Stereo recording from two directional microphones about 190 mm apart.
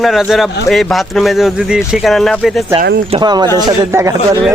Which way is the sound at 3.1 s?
20° right (ahead or behind).